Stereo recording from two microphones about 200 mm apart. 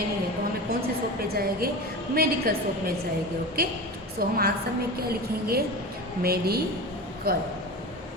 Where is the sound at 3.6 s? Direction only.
50° right (ahead or behind).